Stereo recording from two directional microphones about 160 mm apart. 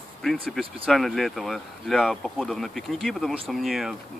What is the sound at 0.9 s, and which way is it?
Speech, centre (ahead or behind).